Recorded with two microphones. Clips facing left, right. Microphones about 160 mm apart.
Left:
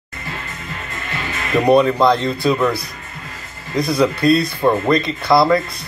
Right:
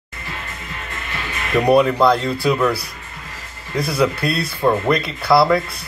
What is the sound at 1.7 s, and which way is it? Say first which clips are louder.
Speech: left 1 dB; 5° right (ahead or behind).